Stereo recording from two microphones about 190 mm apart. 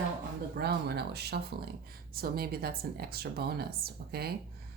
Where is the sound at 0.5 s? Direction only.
60° right (ahead or behind).